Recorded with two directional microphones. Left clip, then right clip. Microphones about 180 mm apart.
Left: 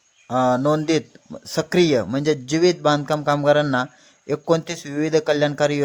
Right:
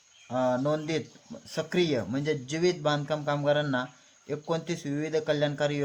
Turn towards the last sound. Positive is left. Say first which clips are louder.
# left 8 dB
turn(degrees=35)  # may be behind; listen again after turning